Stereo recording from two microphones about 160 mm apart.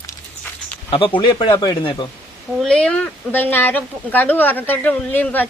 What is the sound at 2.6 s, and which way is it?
Speech, 5° left (ahead or behind).